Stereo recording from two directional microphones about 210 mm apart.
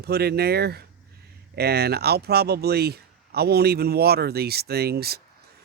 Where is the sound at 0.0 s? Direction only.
50° right (ahead or behind).